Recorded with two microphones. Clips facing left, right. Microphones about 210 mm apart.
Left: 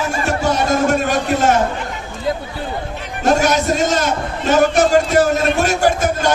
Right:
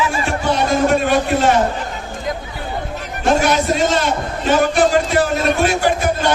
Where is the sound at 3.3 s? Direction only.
45° left (ahead or behind).